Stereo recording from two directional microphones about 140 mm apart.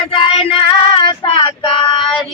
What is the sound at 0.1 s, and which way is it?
Female singing, 40° left (ahead or behind).